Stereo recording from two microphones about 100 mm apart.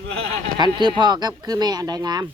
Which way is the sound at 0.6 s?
50° right (ahead or behind).